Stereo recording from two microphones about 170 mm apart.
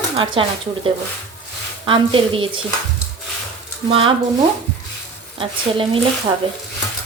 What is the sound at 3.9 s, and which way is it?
Speech, 30° right (ahead or behind).